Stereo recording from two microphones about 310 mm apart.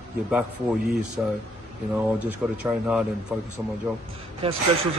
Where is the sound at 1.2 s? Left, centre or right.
Centre.